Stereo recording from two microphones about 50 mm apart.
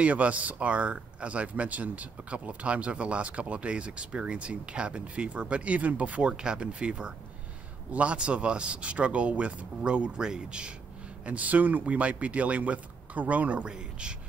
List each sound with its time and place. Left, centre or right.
0.0 s speech: right
11.2 s speech: right
13.7 s speech: centre